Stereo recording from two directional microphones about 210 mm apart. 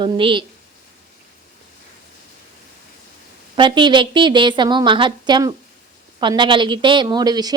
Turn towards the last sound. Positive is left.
turn(degrees=-20)  # may be behind; listen again after turning